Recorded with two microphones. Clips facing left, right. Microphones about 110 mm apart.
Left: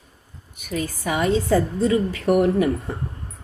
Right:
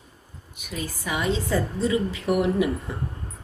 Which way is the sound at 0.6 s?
50° left (ahead or behind).